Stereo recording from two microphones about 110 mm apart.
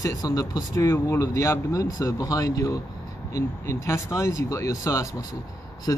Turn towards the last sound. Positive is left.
turn(degrees=30)  # may be behind; listen again after turning